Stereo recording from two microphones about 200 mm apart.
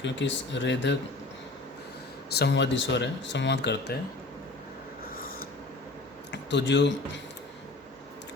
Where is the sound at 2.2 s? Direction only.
55° left (ahead or behind).